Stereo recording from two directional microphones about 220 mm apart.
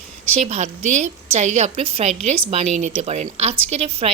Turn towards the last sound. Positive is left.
turn(degrees=-30)  # may be behind; listen again after turning